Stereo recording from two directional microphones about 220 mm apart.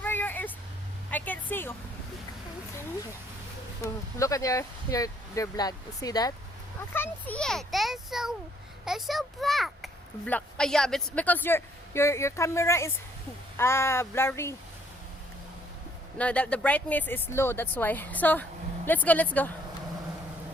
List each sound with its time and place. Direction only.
0.0 s vehicle: 10° left (ahead or behind)
1.1 s a sound: 10° left (ahead or behind)
3.8 s a child's voice: 15° left (ahead or behind)
16.1 s a child's voice: 5° left (ahead or behind)